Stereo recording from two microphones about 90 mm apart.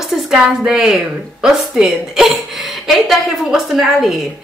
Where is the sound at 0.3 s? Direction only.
5° right (ahead or behind).